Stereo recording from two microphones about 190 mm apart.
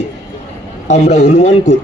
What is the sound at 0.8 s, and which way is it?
Speech, 35° left (ahead or behind).